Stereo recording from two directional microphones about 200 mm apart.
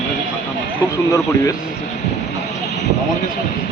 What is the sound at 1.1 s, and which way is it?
Speech, 15° left (ahead or behind).